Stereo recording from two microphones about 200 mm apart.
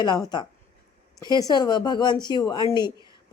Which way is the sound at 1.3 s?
20° left (ahead or behind).